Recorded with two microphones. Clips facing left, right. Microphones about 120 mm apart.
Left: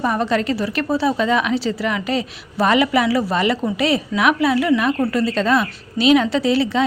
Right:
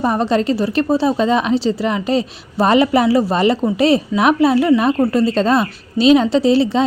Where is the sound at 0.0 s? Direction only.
30° right (ahead or behind).